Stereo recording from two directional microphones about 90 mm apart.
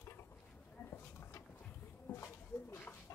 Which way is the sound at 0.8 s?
30° left (ahead or behind).